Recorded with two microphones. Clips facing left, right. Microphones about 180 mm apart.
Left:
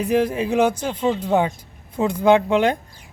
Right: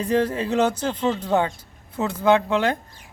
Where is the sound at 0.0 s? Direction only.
10° left (ahead or behind).